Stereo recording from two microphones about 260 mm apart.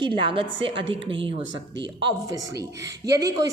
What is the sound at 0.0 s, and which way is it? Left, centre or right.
Speech, centre.